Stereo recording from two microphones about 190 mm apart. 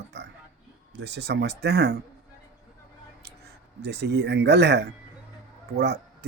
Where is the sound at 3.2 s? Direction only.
60° right (ahead or behind).